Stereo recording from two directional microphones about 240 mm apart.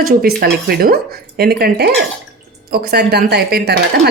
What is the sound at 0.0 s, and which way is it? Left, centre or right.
Speech, right.